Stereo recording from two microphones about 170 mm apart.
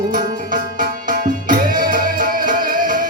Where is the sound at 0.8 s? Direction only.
50° right (ahead or behind).